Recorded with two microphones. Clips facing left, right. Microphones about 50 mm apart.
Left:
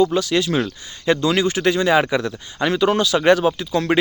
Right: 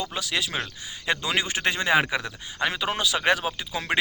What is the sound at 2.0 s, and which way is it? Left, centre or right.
Speech, centre.